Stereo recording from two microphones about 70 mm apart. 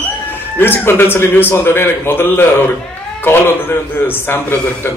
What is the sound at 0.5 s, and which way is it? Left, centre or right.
A man's voice, left.